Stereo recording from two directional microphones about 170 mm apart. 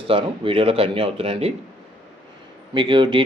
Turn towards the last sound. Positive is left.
turn(degrees=-30)  # may be behind; listen again after turning